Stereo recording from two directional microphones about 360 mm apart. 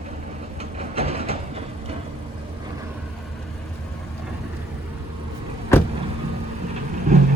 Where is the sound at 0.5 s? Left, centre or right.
Centre.